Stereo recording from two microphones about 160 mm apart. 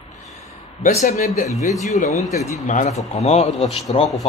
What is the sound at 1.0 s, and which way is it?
A man's voice, 45° left (ahead or behind).